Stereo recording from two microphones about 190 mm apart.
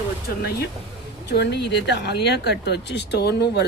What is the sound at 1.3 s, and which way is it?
Speech, 60° left (ahead or behind).